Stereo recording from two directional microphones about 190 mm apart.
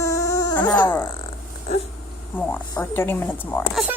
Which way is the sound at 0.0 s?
20° left (ahead or behind).